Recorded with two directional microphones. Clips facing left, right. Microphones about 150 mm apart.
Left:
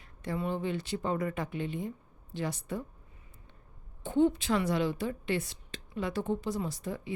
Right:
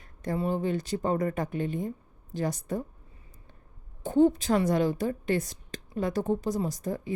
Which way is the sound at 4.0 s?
40° right (ahead or behind).